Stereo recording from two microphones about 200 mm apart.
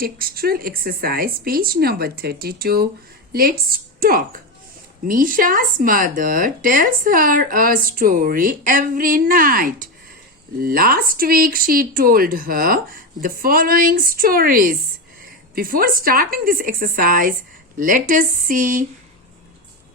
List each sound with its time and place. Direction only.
0.0 s speech: 45° right (ahead or behind)